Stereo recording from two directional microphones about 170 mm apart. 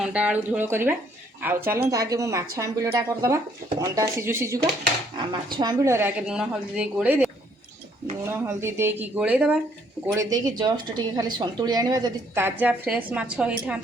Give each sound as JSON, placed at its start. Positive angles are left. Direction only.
{"t": 0.0, "sound": "a woman's voice", "side_deg": -5}
{"t": 5.3, "sound": "a woman's voice", "side_deg": -25}
{"t": 8.3, "sound": "a woman's voice", "side_deg": -15}
{"t": 10.2, "sound": "speech", "side_deg": -20}